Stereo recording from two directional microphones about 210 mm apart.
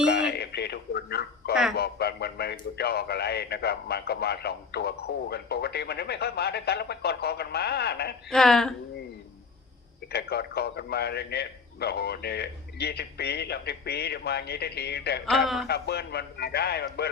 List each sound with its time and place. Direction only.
0.1 s a man's voice: 55° left (ahead or behind)
8.3 s a woman's voice: centre (ahead or behind)
10.1 s a man's voice: 50° left (ahead or behind)
15.3 s a woman's voice: centre (ahead or behind)
15.6 s a man's voice: 50° left (ahead or behind)